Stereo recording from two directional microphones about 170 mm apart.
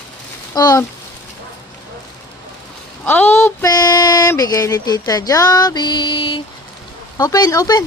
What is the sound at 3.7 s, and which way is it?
Music, 25° left (ahead or behind).